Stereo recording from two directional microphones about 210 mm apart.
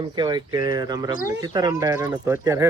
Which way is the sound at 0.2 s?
20° right (ahead or behind).